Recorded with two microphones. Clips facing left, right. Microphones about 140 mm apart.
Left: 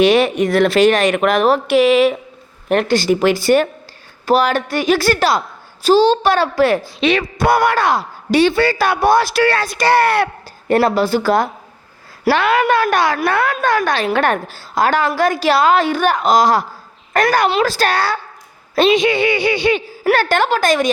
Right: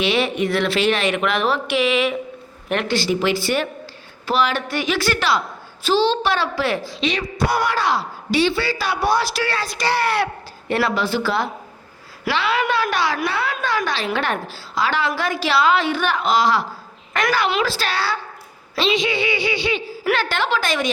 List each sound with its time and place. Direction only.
0.0 s a woman's voice: 45° left (ahead or behind)